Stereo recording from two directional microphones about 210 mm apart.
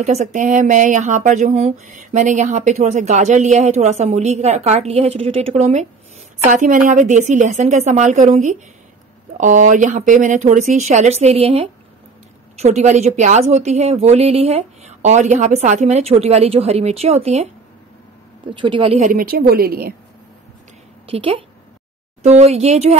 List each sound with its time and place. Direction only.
0.0 s speech: 35° right (ahead or behind)
18.5 s speech: 25° right (ahead or behind)
19.1 s a woman's voice: 45° right (ahead or behind)
21.1 s speech: 25° right (ahead or behind)